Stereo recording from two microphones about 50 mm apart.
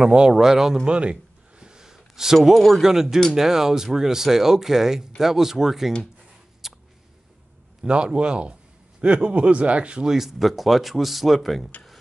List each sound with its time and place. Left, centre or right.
0.0 s speech: centre
0.8 s speech: right
1.6 s gasp: centre
2.3 s speech: centre
6.6 s a sound: centre
7.8 s speech: centre
10.0 s speech: centre